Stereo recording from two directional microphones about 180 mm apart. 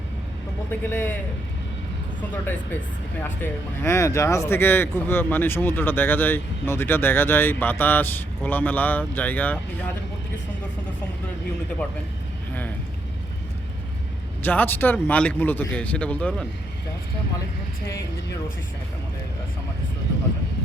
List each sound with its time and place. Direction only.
0.7 s speech: 10° left (ahead or behind)
2.3 s speech: 10° left (ahead or behind)
14.4 s speech: 10° left (ahead or behind)